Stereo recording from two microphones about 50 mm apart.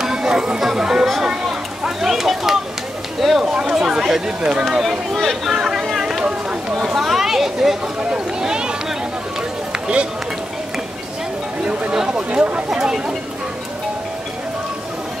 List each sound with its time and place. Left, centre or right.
0.0 s chatter: centre
2.0 s speech: centre
5.1 s speech: centre
9.7 s run: right
11.9 s speech: centre